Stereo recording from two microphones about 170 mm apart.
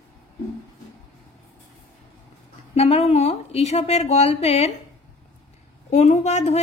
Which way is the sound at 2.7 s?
35° left (ahead or behind).